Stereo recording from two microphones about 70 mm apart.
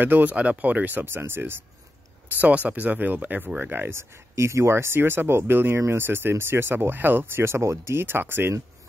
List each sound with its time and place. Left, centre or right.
0.0 s speech: right
2.3 s speech: right